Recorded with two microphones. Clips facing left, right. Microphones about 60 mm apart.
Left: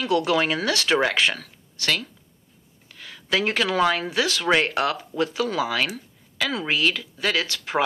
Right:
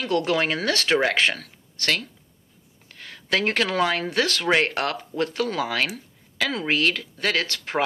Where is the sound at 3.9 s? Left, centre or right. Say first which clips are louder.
Even; right.